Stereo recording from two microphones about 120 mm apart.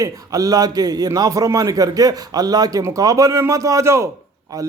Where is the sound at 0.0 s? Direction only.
30° right (ahead or behind).